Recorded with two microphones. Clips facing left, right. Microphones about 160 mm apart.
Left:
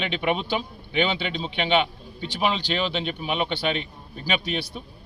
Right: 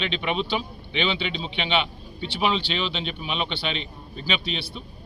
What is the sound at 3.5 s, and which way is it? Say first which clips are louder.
Speech: left 4 dB; 45° left (ahead or behind).